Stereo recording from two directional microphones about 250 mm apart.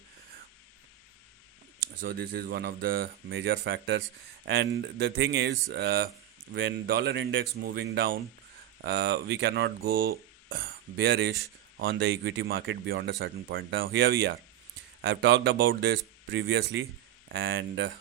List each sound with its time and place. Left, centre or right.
2.0 s speech: right
11.0 s speech: right